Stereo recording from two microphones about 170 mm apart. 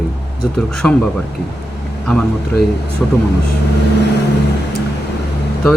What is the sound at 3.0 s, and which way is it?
Speech, 5° left (ahead or behind).